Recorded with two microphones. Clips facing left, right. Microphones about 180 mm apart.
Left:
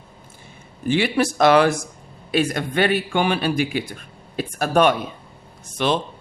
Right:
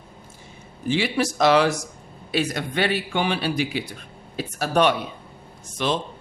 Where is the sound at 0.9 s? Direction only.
55° left (ahead or behind).